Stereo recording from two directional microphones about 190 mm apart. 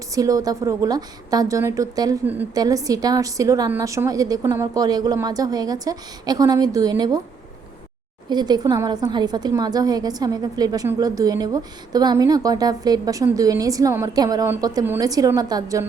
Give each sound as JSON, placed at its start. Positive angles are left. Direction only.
{"t": 0.1, "sound": "a woman's voice", "side_deg": -20}
{"t": 8.3, "sound": "a woman's voice", "side_deg": -20}